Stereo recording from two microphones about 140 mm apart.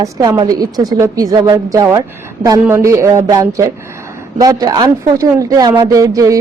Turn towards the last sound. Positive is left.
turn(degrees=-25)  # may be behind; listen again after turning